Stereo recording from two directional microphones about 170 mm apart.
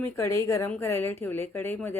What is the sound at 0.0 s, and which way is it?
A woman's voice, 15° left (ahead or behind).